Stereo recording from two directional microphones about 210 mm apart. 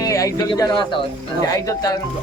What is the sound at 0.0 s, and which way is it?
A man's voice, 15° left (ahead or behind).